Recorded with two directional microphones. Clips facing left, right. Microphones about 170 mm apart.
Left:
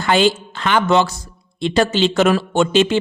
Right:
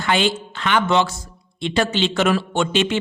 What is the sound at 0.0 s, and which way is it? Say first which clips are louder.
A man's voice: left 4 dB; 40° left (ahead or behind).